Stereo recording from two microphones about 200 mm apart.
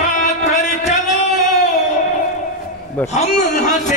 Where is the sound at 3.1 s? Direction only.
35° left (ahead or behind).